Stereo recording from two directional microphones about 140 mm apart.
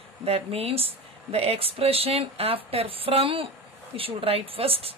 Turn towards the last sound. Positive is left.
turn(degrees=-40)  # may be behind; listen again after turning